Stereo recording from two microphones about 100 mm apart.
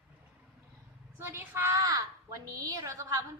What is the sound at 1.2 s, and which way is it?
Speech, 25° right (ahead or behind).